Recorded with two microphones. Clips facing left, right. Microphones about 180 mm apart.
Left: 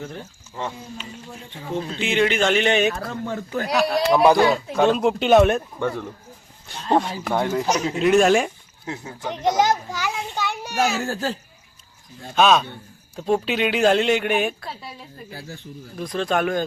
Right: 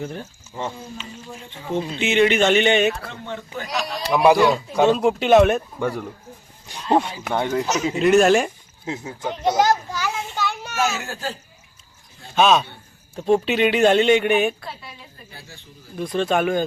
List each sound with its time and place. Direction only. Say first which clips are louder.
0.0 s speech: right 3 dB; 5° right (ahead or behind)
1.8 s speech: right 3 dB; 5° right (ahead or behind)
3.1 s speech: left 5 dB; 45° left (ahead or behind)
3.7 s speech: left 7 dB; 60° left (ahead or behind)
4.1 s speech: right 2 dB; 5° right (ahead or behind)
8.8 s speech: right 3 dB; 20° right (ahead or behind)
9.4 s children playing: right 1 dB; 15° left (ahead or behind)
10.9 s a child's voice: left 4 dB; 40° left (ahead or behind)
12.3 s speech: even; centre (ahead or behind)
16.0 s speech: right 2 dB; centre (ahead or behind)